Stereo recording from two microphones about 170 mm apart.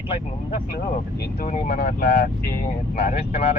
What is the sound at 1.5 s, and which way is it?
Speech, 50° left (ahead or behind).